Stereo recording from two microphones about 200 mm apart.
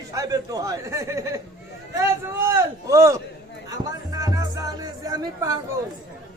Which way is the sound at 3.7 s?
15° right (ahead or behind).